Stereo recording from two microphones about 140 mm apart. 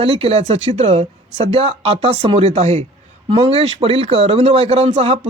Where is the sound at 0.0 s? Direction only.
45° right (ahead or behind).